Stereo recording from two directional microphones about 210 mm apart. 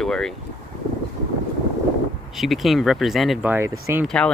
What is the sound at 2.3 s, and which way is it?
Speech, centre (ahead or behind).